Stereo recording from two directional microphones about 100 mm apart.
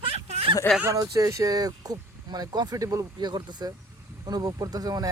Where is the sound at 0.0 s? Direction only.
85° right.